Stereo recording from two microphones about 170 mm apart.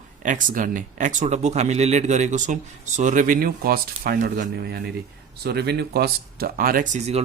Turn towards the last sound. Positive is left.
turn(degrees=-45)  # may be behind; listen again after turning